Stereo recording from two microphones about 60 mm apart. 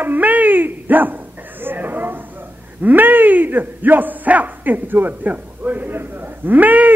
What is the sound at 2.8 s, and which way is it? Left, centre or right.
A man's voice, right.